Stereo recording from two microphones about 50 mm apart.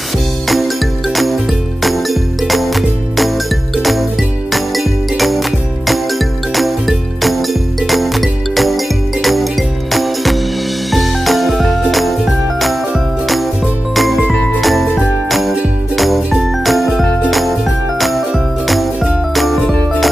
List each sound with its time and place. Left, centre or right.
0.5 s music: centre
3.7 s jingle bell: centre
10.9 s music: centre
13.9 s jingle: centre
14.6 s jingle bell: centre
16.6 s jingle: centre
19.3 s music: centre